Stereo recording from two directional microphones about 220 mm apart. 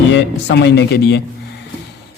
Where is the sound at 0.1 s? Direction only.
50° left (ahead or behind).